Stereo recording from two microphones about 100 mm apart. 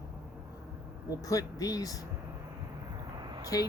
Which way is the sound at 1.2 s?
35° left (ahead or behind).